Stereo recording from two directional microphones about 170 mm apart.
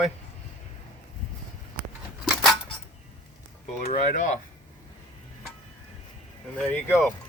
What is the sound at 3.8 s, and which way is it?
Speech, 45° left (ahead or behind).